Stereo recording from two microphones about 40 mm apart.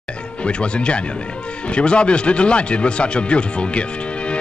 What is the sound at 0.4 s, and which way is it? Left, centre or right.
Speech, left.